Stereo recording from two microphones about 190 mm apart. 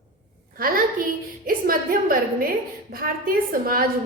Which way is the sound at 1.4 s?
50° right (ahead or behind).